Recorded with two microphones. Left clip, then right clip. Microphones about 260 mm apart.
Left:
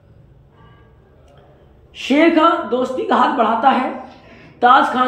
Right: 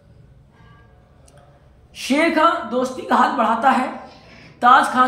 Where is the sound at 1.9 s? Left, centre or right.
Centre.